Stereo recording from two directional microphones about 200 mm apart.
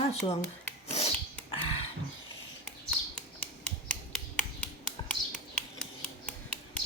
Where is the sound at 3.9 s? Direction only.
5° left (ahead or behind).